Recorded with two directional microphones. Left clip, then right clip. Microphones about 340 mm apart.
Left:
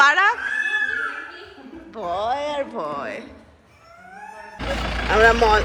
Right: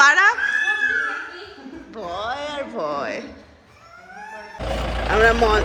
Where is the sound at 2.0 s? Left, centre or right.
Centre.